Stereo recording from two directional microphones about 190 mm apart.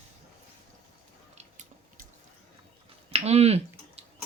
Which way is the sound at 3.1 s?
35° right (ahead or behind).